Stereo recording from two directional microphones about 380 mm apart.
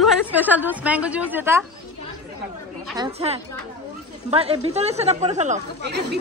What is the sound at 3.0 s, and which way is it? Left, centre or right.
Speech, centre.